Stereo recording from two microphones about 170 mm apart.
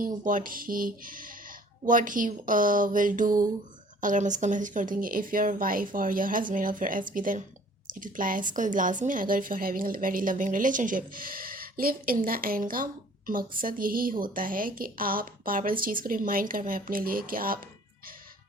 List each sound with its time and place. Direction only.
0.0 s a woman's voice: 50° right (ahead or behind)